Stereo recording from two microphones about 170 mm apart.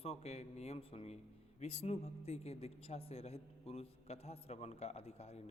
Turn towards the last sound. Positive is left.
turn(degrees=35)  # may be behind; listen again after turning